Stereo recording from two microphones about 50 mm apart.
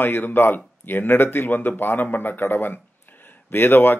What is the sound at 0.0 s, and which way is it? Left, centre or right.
Speech, left.